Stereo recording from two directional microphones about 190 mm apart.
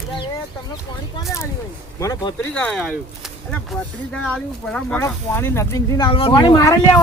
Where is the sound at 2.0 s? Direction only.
15° left (ahead or behind).